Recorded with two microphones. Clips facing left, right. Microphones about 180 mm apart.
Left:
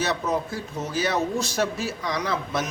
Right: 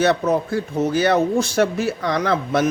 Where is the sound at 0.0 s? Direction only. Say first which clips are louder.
Right 8 dB; 60° right (ahead or behind).